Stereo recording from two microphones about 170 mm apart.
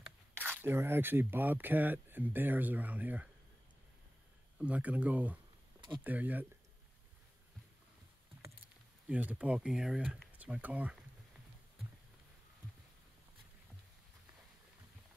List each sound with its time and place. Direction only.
0.6 s speech: 15° right (ahead or behind)
4.6 s speech: 10° right (ahead or behind)
5.8 s a sound: 25° right (ahead or behind)
6.0 s speech: 10° right (ahead or behind)
9.1 s speech: 10° right (ahead or behind)